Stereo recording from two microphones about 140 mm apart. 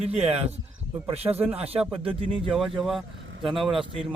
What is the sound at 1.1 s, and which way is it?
Speech, 45° right (ahead or behind).